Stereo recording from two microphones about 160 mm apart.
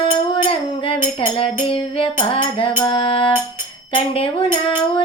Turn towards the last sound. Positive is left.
turn(degrees=35)  # may be behind; listen again after turning